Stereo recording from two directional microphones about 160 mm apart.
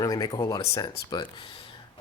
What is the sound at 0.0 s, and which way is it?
Speech, 20° left (ahead or behind).